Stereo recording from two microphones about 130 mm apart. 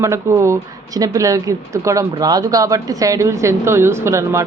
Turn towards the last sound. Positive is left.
turn(degrees=-25)  # may be behind; listen again after turning